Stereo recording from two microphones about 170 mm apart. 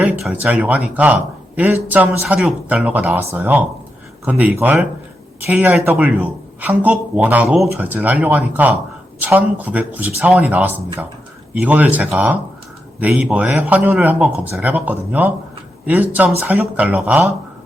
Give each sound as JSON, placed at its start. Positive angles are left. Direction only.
{"t": 0.0, "sound": "speech", "side_deg": -5}